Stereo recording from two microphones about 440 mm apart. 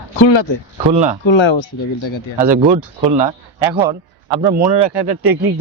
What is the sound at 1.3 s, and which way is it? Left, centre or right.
Speech, left.